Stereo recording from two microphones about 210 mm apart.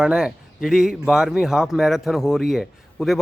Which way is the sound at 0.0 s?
5° right (ahead or behind).